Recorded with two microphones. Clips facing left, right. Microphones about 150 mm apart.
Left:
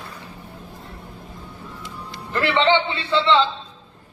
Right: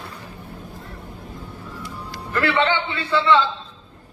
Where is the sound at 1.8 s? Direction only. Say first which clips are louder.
Right 2 dB; 20° left (ahead or behind).